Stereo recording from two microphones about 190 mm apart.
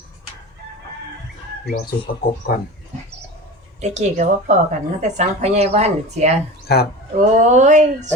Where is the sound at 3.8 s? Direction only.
35° right (ahead or behind).